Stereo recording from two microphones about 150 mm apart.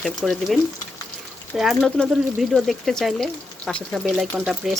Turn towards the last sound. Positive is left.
turn(degrees=0)  # may be behind; listen again after turning